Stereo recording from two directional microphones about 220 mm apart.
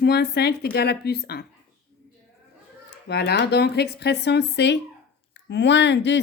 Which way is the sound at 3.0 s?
50° left (ahead or behind).